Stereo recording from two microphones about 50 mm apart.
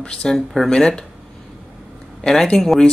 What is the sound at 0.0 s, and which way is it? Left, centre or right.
Speech, centre.